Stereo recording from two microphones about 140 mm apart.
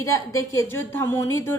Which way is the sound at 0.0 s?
20° left (ahead or behind).